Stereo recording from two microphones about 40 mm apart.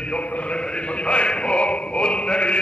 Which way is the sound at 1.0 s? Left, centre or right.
Left.